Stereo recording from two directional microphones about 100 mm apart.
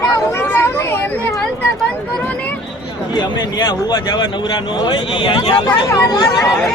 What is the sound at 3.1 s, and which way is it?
Speech, 45° left (ahead or behind).